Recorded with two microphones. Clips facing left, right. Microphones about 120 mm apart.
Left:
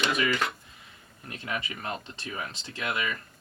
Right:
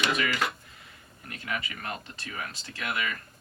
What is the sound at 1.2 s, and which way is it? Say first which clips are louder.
Speech: left 1 dB; 25° left (ahead or behind).